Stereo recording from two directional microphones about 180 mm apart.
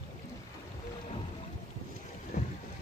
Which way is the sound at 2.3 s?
45° left (ahead or behind).